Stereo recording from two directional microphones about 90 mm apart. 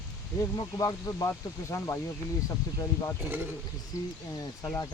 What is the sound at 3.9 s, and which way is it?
Speech, 40° left (ahead or behind).